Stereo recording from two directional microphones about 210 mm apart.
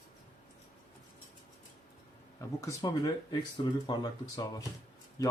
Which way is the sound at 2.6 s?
15° left (ahead or behind).